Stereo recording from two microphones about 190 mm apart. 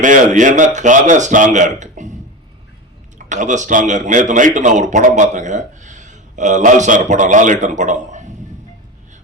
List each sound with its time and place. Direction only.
0.0 s speech: 40° right (ahead or behind)
3.2 s speech: 40° right (ahead or behind)